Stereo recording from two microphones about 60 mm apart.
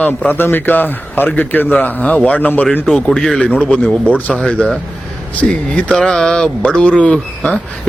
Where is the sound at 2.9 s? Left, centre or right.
Centre.